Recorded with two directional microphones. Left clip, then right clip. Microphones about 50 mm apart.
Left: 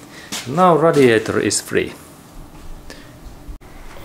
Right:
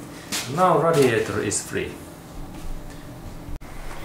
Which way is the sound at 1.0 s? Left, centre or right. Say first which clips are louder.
Left 7 dB; left.